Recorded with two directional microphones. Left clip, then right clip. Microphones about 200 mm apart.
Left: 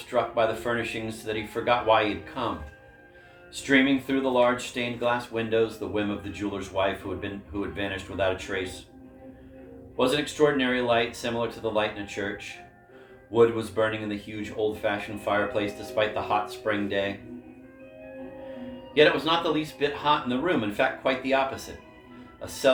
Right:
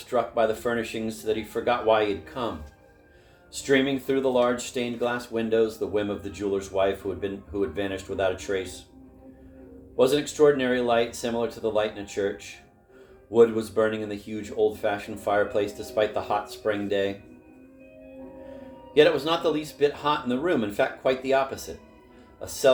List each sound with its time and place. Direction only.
0.1 s speech: 55° right (ahead or behind)
3.5 s speech: 55° right (ahead or behind)
10.0 s speech: 55° right (ahead or behind)
18.9 s speech: 55° right (ahead or behind)